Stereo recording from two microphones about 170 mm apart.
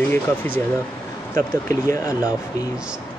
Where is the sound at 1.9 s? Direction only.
20° left (ahead or behind).